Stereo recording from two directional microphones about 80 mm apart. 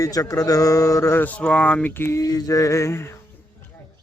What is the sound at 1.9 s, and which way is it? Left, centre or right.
Mantra, left.